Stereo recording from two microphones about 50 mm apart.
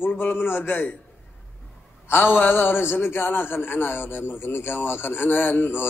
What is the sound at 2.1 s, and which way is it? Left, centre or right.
A man's voice, left.